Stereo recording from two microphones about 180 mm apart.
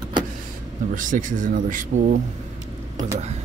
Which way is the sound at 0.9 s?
45° right (ahead or behind).